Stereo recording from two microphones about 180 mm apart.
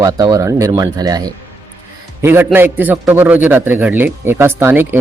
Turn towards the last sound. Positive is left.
turn(degrees=-10)  # may be behind; listen again after turning